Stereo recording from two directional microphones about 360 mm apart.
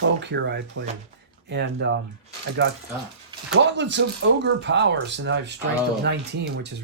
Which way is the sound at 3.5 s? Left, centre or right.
Right.